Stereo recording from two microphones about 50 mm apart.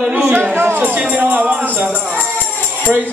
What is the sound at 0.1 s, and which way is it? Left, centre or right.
Speech, right.